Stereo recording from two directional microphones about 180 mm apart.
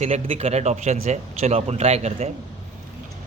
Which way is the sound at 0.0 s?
35° right (ahead or behind).